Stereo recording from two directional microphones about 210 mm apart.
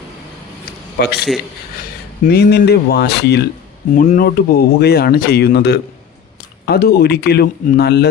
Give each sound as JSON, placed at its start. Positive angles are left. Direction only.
{"t": 1.0, "sound": "speech", "side_deg": 50}
{"t": 2.2, "sound": "speech", "side_deg": 50}
{"t": 3.9, "sound": "speech", "side_deg": 35}